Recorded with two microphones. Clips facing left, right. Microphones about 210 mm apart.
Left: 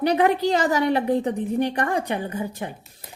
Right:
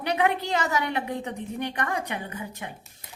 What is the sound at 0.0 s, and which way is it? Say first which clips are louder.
A woman's voice: left 6 dB; 35° left (ahead or behind).